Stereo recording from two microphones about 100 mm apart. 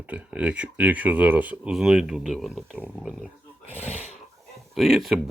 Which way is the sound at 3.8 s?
90° left.